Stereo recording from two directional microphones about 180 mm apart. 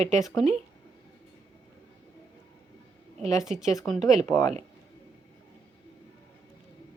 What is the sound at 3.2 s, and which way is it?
Speech, 40° right (ahead or behind).